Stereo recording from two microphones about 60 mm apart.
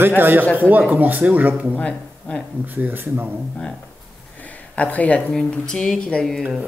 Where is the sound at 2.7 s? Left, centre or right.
Right.